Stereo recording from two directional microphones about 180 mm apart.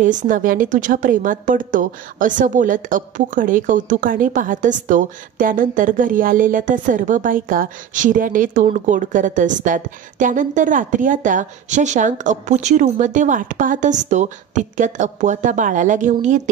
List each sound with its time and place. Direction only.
0.0 s a woman's voice: 45° right (ahead or behind)